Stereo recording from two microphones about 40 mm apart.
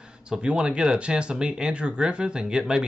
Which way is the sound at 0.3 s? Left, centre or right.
Right.